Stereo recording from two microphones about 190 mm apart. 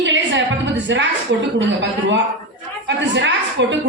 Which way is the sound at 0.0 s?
70° right (ahead or behind).